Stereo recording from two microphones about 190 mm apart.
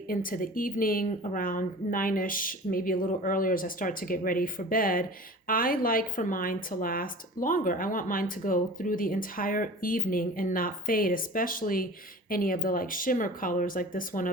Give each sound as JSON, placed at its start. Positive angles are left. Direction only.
{"t": 0.1, "sound": "a woman's voice", "side_deg": 50}